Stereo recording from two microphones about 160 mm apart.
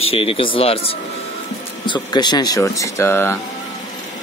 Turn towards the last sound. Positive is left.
turn(degrees=15)  # may be behind; listen again after turning